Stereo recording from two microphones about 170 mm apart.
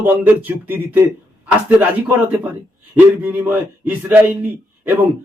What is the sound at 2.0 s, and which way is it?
Speech, 10° right (ahead or behind).